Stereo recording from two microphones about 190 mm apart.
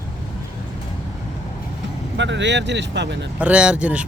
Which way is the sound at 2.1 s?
70° right (ahead or behind).